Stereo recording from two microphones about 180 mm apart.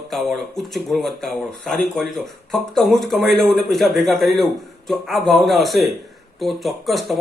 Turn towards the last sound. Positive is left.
turn(degrees=0)  # may be behind; listen again after turning